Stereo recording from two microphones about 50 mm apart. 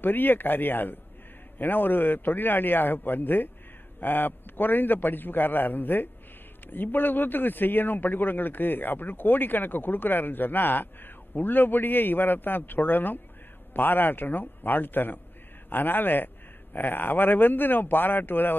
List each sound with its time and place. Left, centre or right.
0.0 s a man's voice: left